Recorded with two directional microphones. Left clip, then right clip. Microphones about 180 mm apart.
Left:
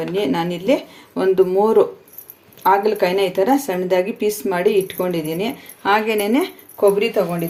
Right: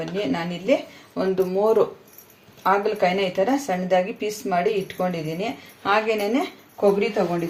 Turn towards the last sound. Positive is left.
turn(degrees=70)  # may be behind; listen again after turning